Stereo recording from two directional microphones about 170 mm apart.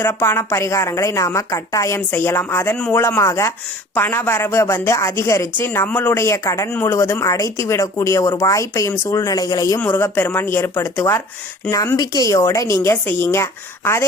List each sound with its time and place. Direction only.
0.0 s a woman's voice: 15° left (ahead or behind)